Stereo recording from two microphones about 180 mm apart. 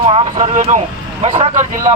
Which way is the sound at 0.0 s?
30° right (ahead or behind).